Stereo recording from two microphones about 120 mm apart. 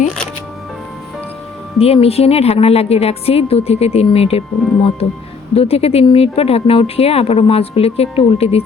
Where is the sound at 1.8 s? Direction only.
55° left (ahead or behind).